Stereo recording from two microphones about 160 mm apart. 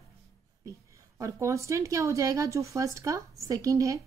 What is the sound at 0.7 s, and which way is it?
Speech, 20° right (ahead or behind).